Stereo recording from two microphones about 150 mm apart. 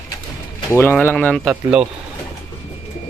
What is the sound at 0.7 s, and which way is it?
Speech, 15° left (ahead or behind).